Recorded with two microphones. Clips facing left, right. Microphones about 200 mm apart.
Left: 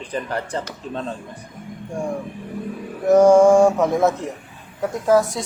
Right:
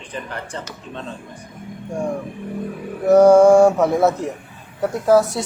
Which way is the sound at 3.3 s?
5° right (ahead or behind).